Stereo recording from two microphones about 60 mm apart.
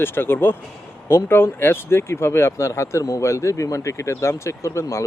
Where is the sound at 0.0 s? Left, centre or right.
Left.